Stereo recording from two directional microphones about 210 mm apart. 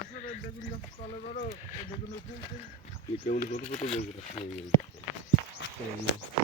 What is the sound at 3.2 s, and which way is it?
Speech, 35° left (ahead or behind).